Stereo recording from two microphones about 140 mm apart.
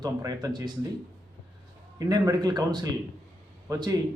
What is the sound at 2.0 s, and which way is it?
A man's voice, 25° right (ahead or behind).